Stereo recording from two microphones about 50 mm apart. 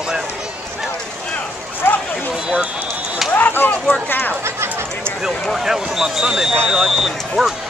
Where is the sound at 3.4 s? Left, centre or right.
Left.